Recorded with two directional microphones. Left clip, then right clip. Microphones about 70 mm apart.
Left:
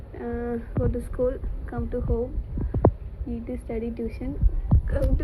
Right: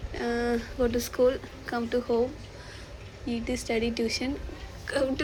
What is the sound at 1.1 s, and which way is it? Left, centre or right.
Speech, right.